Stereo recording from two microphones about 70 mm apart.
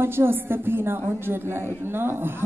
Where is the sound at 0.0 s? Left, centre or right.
Right.